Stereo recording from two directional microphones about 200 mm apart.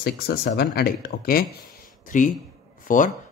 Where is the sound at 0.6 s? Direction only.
50° left (ahead or behind).